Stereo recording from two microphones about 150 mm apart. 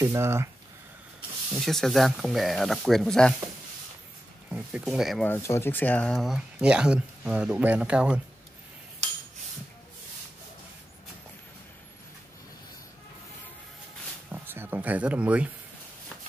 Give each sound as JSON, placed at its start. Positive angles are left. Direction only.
{"t": 0.0, "sound": "speech", "side_deg": -20}
{"t": 1.5, "sound": "speech", "side_deg": 0}
{"t": 4.5, "sound": "speech", "side_deg": -5}
{"t": 5.2, "sound": "speech", "side_deg": 15}
{"t": 14.3, "sound": "a sound", "side_deg": -15}